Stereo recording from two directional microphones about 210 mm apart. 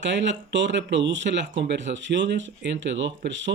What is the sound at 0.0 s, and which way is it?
Speech, 60° right (ahead or behind).